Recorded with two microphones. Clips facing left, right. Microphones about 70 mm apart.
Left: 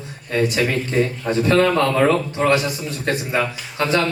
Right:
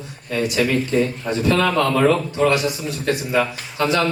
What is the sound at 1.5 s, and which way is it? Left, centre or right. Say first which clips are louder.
A man's voice: left 1 dB; left.